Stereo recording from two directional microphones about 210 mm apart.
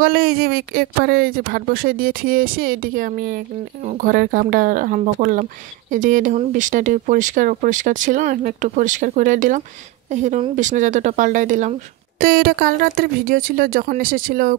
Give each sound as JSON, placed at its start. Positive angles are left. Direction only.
{"t": 0.0, "sound": "a woman's voice", "side_deg": -45}
{"t": 12.2, "sound": "speech", "side_deg": -50}